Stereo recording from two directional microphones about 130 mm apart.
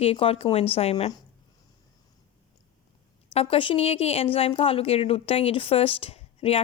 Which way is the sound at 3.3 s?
45° left (ahead or behind).